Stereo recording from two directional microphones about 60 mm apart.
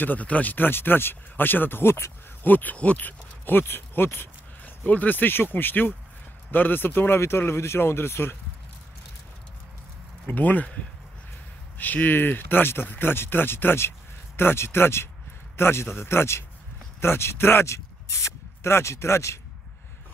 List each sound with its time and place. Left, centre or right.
0.0 s speech: left
2.4 s speech: left
4.8 s speech: left
10.2 s speech: left
11.8 s speech: left